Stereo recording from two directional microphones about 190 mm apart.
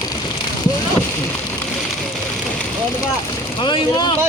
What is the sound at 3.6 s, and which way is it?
Speech, 25° left (ahead or behind).